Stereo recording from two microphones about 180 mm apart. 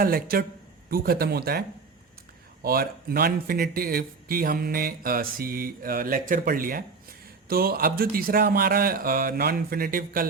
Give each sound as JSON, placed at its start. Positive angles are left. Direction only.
{"t": 0.0, "sound": "a man's voice", "side_deg": -55}
{"t": 2.6, "sound": "a man's voice", "side_deg": -55}